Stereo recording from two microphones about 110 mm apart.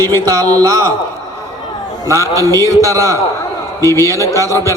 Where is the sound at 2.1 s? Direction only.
30° right (ahead or behind).